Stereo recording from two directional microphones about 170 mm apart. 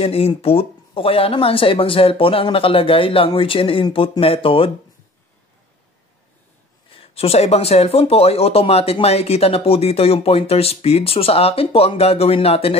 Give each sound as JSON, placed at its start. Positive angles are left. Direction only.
{"t": 0.0, "sound": "speech", "side_deg": 35}
{"t": 6.9, "sound": "speech", "side_deg": 35}